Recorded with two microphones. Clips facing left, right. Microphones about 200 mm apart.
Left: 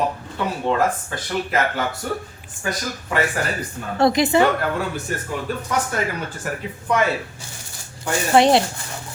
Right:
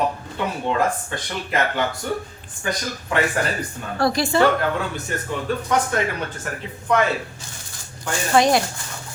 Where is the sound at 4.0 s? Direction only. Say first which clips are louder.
Left 2 dB; 20° left (ahead or behind).